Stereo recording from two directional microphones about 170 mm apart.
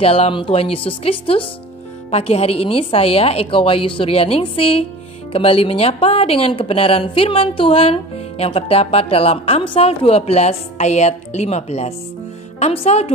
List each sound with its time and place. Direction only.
0.0 s speech: 35° left (ahead or behind)